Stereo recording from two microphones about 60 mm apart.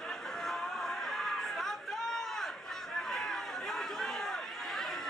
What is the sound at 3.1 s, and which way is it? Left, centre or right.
Chatter, centre.